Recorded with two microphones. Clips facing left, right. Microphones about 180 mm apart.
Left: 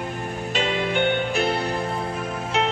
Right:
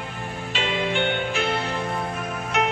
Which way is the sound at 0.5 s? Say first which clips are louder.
Left 2 dB; 45° left (ahead or behind).